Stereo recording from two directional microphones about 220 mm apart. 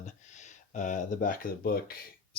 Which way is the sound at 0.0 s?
35° left (ahead or behind).